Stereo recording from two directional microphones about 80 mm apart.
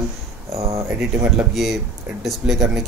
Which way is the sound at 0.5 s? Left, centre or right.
Right.